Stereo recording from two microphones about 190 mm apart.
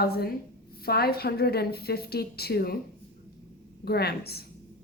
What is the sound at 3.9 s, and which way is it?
Speech, 55° left (ahead or behind).